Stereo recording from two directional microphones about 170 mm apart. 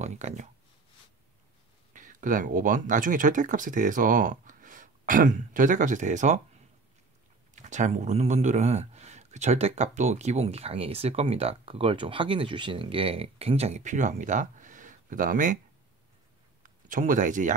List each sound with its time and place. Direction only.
0.0 s speech: 45° right (ahead or behind)
2.0 s speech: 50° right (ahead or behind)
7.5 s speech: 45° right (ahead or behind)
16.6 s speech: 50° right (ahead or behind)